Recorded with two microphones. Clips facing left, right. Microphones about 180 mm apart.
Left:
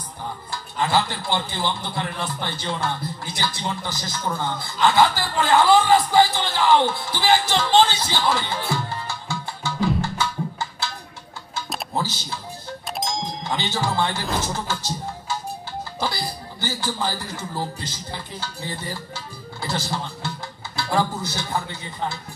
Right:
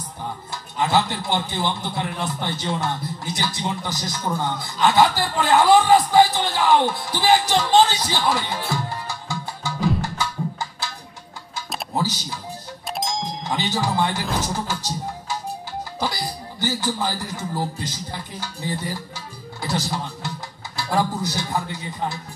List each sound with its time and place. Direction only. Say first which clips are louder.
0.5 s a man's voice: right 1 dB; 20° right (ahead or behind)
11.9 s music: right 3 dB; 15° right (ahead or behind)
12.9 s music: right 1 dB; centre (ahead or behind)
13.6 s speech: right 2 dB; 15° right (ahead or behind)